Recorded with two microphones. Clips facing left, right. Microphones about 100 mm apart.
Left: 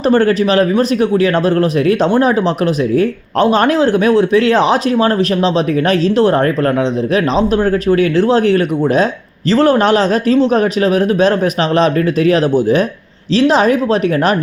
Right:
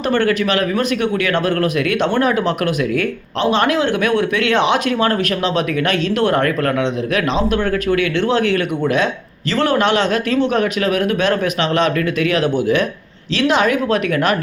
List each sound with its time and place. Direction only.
0.0 s speech: 35° left (ahead or behind)
3.3 s speech: 45° left (ahead or behind)